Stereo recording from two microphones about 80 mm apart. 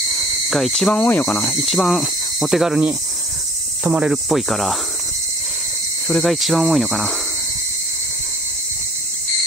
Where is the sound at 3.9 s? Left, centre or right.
Centre.